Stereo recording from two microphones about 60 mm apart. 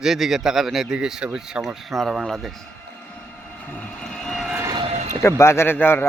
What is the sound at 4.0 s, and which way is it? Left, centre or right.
Vehicle, centre.